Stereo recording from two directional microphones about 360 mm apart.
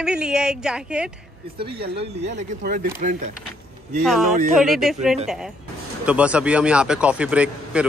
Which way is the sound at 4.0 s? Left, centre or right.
Centre.